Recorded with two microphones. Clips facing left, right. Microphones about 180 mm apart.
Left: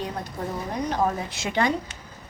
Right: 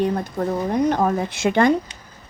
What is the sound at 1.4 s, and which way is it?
Speech, 50° right (ahead or behind).